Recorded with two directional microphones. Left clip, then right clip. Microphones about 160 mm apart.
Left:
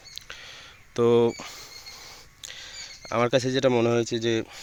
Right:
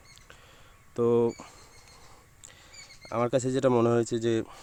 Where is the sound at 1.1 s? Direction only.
Centre (ahead or behind).